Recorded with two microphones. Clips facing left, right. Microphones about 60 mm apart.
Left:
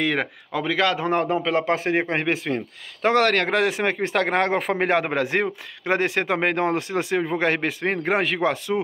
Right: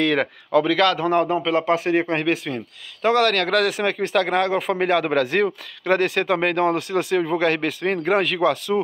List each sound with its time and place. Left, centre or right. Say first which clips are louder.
0.0 s a man's voice: right 3 dB; centre; by 8.7 s left